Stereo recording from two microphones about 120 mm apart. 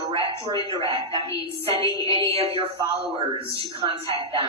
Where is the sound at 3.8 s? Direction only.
50° right (ahead or behind).